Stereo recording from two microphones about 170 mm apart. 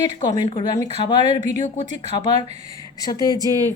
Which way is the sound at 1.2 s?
45° right (ahead or behind).